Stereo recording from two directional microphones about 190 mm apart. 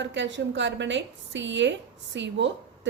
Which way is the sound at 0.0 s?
70° right (ahead or behind).